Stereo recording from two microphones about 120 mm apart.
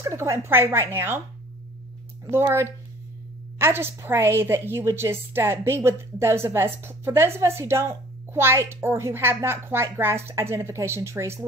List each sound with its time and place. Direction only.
0.0 s a woman's voice: 25° right (ahead or behind)
2.3 s a woman's voice: 20° right (ahead or behind)